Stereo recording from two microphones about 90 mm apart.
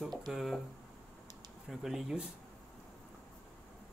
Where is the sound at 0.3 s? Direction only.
Centre (ahead or behind).